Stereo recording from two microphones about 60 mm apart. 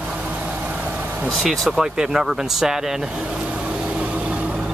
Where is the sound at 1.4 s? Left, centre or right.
Centre.